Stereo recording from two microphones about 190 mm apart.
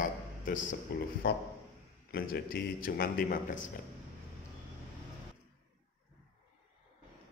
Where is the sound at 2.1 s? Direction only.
50° left (ahead or behind).